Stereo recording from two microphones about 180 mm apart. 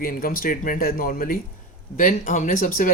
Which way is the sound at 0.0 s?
50° left (ahead or behind).